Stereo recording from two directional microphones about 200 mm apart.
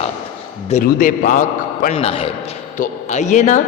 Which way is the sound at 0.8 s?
40° left (ahead or behind).